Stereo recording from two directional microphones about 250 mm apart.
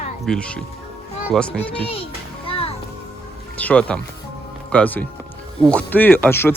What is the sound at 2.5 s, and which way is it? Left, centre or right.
Music, left.